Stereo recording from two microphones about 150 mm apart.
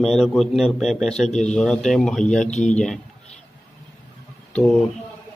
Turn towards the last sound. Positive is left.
turn(degrees=5)  # may be behind; listen again after turning